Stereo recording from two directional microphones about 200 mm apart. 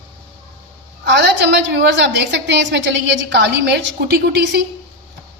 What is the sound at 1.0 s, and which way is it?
A woman's voice, 60° right (ahead or behind).